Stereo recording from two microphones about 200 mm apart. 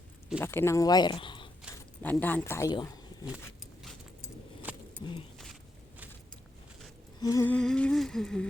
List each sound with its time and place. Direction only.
0.3 s speech: 10° left (ahead or behind)
2.0 s speech: 10° left (ahead or behind)
4.7 s vehicle: 5° right (ahead or behind)
7.2 s humming: 15° left (ahead or behind)